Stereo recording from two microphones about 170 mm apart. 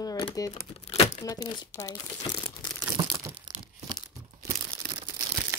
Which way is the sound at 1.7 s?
20° left (ahead or behind).